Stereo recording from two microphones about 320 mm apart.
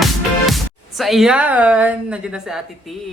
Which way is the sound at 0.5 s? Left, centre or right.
Centre.